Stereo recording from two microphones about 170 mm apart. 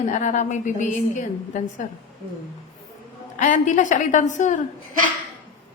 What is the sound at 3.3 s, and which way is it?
A woman's voice, 45° left (ahead or behind).